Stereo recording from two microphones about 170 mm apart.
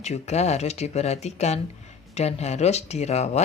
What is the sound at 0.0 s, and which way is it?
Speech, 40° left (ahead or behind).